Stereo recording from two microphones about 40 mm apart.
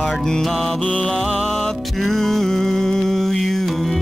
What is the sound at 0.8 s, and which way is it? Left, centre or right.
Music, left.